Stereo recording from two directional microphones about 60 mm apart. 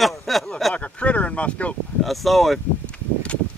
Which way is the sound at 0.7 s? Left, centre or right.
Left.